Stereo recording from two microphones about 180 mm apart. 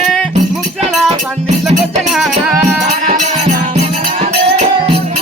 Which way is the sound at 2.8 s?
45° right (ahead or behind).